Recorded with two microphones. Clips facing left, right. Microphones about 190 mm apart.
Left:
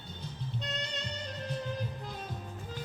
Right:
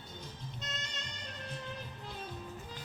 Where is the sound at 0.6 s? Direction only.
35° left (ahead or behind).